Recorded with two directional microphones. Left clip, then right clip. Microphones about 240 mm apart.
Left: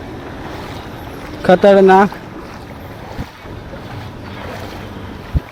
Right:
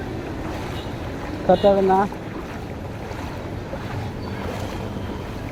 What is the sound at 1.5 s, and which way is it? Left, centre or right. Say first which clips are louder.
Speech: left 8 dB; left.